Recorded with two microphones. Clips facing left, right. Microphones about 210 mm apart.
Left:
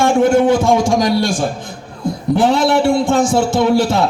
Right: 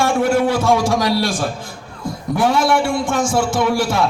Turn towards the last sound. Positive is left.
turn(degrees=25)  # may be behind; listen again after turning